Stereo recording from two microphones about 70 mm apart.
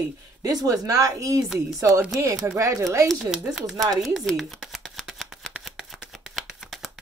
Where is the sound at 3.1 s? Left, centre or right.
Centre.